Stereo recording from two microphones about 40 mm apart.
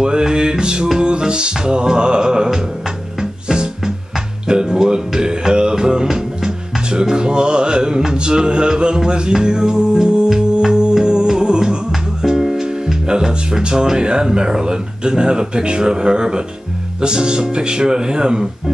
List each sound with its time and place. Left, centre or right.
0.0 s music: right
11.9 s speech: centre
17.0 s music: right